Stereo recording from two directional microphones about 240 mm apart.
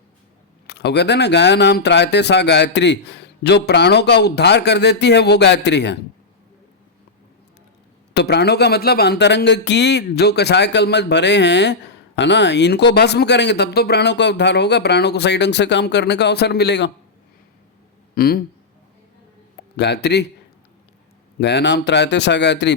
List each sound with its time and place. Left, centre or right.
0.7 s speech: left
8.1 s speech: left
18.1 s speech: left
19.7 s speech: left
21.3 s speech: left